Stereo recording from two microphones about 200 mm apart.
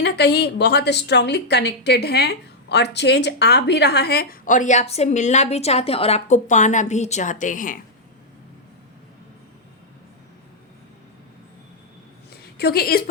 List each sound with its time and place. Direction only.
0.0 s a woman's voice: 55° left (ahead or behind)
12.5 s a woman's voice: 50° left (ahead or behind)